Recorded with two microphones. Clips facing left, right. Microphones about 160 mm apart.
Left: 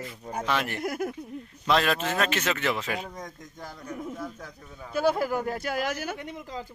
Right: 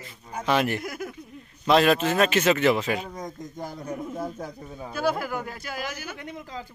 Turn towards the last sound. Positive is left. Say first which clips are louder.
# left 5 dB
turn(degrees=60)  # may be behind; listen again after turning